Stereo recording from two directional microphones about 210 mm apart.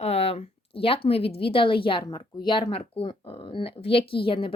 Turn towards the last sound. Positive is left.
turn(degrees=25)  # may be behind; listen again after turning